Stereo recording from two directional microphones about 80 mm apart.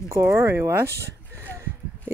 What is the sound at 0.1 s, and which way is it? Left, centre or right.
Speech, right.